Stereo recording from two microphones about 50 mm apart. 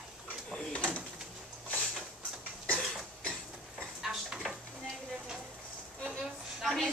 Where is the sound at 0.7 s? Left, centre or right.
Left.